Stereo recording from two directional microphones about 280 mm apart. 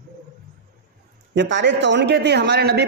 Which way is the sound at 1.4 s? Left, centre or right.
Right.